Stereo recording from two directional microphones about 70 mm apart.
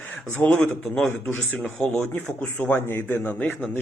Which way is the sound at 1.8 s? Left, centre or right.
Centre.